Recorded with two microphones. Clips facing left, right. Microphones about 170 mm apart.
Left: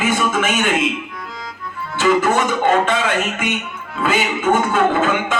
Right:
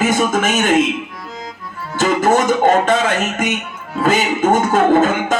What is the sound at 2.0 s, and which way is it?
Speech, 45° right (ahead or behind).